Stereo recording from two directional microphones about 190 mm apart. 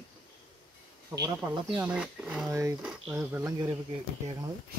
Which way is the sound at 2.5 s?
15° right (ahead or behind).